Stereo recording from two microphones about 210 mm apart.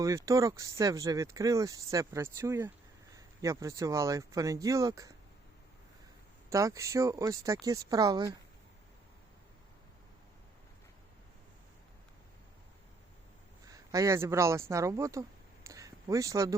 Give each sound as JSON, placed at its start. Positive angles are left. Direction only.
{"t": 0.0, "sound": "speech", "side_deg": -15}
{"t": 6.5, "sound": "speech", "side_deg": -15}
{"t": 13.7, "sound": "speech", "side_deg": -15}
{"t": 15.6, "sound": "a sound", "side_deg": -15}